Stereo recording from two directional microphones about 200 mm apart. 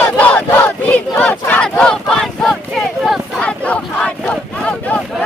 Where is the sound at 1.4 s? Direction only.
10° left (ahead or behind).